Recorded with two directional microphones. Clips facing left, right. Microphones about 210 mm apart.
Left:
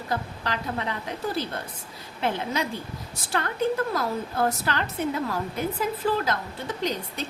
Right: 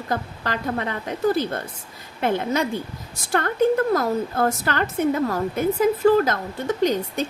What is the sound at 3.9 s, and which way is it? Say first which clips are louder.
A woman's voice: right 6 dB; 50° right (ahead or behind).